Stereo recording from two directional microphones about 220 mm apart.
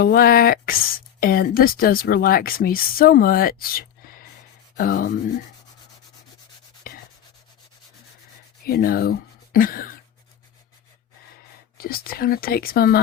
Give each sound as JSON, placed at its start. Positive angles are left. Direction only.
{"t": 0.0, "sound": "speech", "side_deg": 40}
{"t": 6.8, "sound": "rub", "side_deg": 40}
{"t": 8.6, "sound": "speech", "side_deg": 45}
{"t": 11.8, "sound": "speech", "side_deg": 45}